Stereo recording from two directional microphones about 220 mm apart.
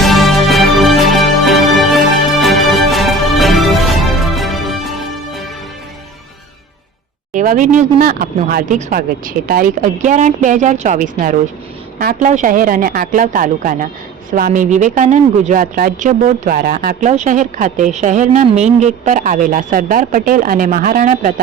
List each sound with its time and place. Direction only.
0.0 s music: centre (ahead or behind)
7.3 s speech: 35° right (ahead or behind)